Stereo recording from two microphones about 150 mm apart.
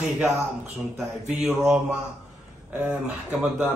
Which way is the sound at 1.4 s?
15° right (ahead or behind).